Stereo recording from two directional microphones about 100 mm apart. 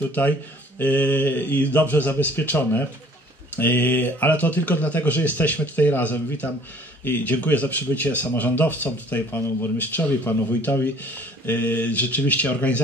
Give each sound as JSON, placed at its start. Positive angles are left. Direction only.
{"t": 0.7, "sound": "speech", "side_deg": 15}